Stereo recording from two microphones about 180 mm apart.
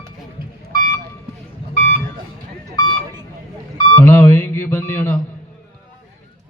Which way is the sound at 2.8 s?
20° left (ahead or behind).